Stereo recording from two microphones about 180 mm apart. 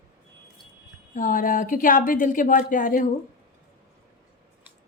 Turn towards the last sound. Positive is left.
turn(degrees=50)  # may be behind; listen again after turning